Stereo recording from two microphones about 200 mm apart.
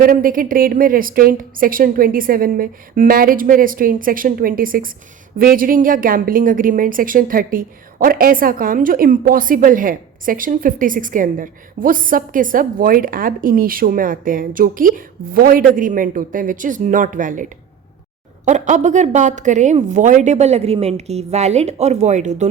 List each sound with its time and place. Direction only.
0.0 s a woman's voice: 45° right (ahead or behind)
18.4 s a woman's voice: 35° right (ahead or behind)